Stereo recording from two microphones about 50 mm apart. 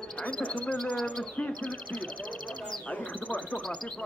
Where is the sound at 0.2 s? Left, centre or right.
Left.